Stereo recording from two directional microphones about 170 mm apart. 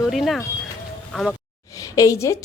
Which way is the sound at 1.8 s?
20° left (ahead or behind).